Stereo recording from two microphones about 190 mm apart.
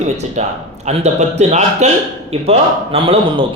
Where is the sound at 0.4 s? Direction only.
35° right (ahead or behind).